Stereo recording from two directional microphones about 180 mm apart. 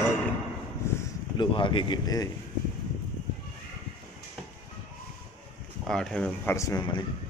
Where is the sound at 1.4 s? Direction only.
25° left (ahead or behind).